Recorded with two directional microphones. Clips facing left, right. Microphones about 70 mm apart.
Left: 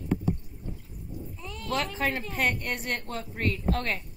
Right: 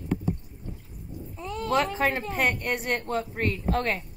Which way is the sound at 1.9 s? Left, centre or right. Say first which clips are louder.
Right 3 dB; centre.